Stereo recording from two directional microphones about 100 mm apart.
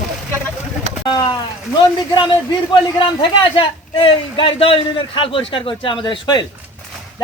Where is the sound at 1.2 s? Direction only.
45° left (ahead or behind).